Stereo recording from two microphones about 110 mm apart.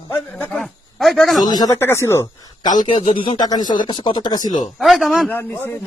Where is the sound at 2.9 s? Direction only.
55° left (ahead or behind).